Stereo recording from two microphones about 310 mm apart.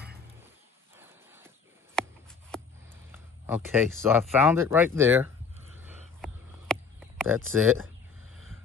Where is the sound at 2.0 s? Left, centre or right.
Centre.